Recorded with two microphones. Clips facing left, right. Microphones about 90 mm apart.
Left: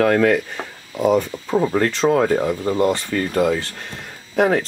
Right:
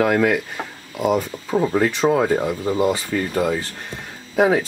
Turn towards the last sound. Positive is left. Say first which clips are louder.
# even
turn(degrees=-5)  # may be behind; listen again after turning